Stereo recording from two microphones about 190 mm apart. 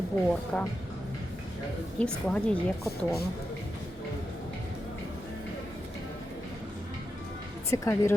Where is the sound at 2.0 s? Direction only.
5° left (ahead or behind).